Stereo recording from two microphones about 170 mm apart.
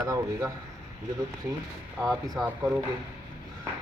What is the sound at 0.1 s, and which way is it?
Speech, 20° right (ahead or behind).